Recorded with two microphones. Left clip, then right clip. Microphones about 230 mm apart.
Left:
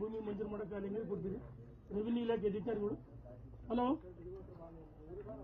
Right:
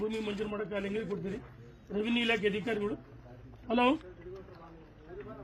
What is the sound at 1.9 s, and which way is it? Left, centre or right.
A man's voice, right.